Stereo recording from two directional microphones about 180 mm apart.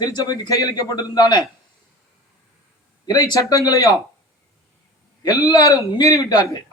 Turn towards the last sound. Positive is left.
turn(degrees=20)  # may be behind; listen again after turning